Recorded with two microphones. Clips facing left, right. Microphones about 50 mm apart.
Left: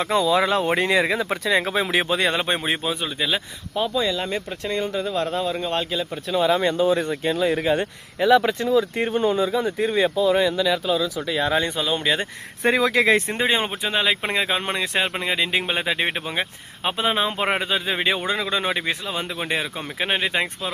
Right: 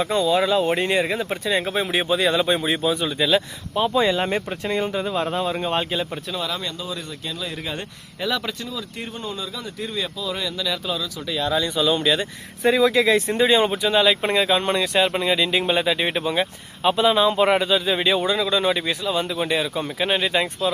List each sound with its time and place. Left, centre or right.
0.1 s speech: left
2.3 s speech: left
2.8 s speech: centre
3.8 s speech: right
6.3 s speech: centre
6.6 s speech: left
11.5 s speech: left
12.6 s speech: left